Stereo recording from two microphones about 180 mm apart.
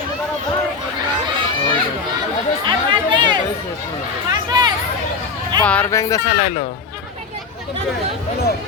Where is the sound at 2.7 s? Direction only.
25° right (ahead or behind).